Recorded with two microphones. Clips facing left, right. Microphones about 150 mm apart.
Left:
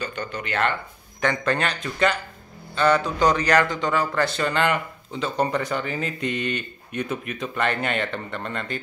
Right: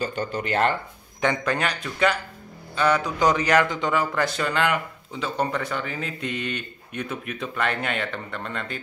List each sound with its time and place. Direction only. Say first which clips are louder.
0.0 s speech: right 3 dB; 40° right (ahead or behind)
1.4 s a man's voice: left 1 dB; 5° right (ahead or behind)
4.4 s speech: left 1 dB; 5° right (ahead or behind)